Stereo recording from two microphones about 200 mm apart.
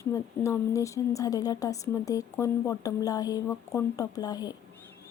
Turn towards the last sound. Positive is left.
turn(degrees=20)  # may be behind; listen again after turning